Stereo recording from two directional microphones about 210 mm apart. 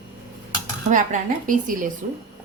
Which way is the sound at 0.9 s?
35° right (ahead or behind).